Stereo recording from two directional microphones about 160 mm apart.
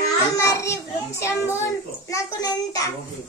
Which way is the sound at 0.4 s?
20° left (ahead or behind).